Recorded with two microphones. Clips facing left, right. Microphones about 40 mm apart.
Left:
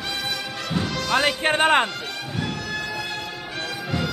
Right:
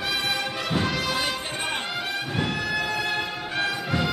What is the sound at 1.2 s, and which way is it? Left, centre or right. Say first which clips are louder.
Music: left 9 dB; left.